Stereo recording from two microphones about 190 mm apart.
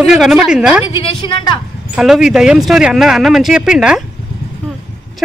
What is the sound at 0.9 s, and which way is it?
Speech, 30° left (ahead or behind).